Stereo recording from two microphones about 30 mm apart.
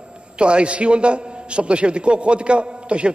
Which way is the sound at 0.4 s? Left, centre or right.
Right.